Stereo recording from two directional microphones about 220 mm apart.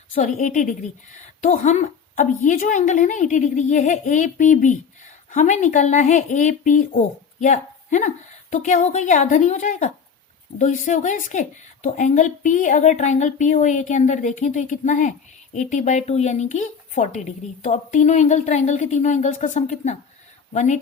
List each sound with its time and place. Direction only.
0.1 s speech: 35° left (ahead or behind)